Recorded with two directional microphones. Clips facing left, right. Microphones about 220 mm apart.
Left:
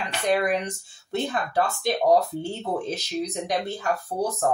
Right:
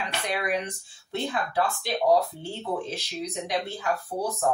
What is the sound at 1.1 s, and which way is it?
A woman's voice, 45° left (ahead or behind).